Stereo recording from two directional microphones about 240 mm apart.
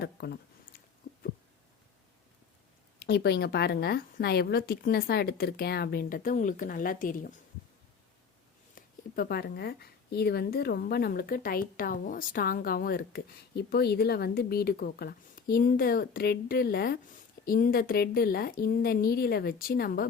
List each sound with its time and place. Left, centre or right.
0.0 s a sound: left
3.0 s a woman's voice: left
8.7 s a woman's voice: left